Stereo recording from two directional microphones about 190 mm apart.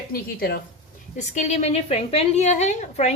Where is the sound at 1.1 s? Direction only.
40° left (ahead or behind).